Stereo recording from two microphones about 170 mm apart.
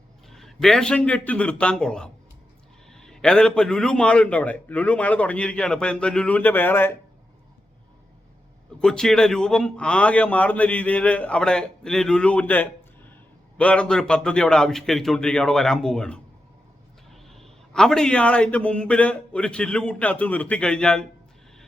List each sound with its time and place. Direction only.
0.3 s a man's voice: centre (ahead or behind)
8.8 s a man's voice: 5° left (ahead or behind)